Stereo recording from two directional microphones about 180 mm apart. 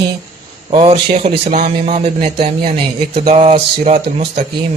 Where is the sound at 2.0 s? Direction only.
25° right (ahead or behind).